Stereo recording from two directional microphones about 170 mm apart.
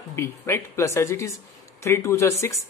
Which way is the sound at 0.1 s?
15° left (ahead or behind).